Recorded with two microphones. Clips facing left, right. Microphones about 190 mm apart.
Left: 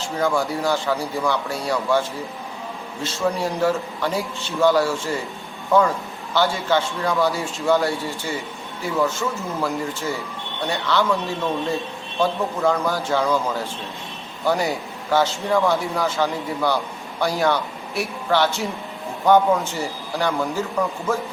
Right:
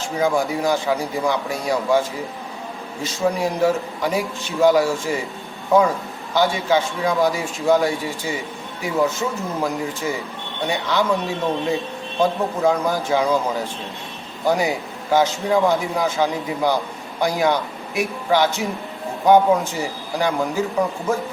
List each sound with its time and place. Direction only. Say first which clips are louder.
0.2 s a man's voice: right 2 dB; 15° right (ahead or behind)
6.3 s a man's voice: right 2 dB; 15° right (ahead or behind)